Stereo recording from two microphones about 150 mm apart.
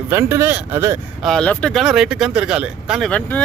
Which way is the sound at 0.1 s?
15° right (ahead or behind).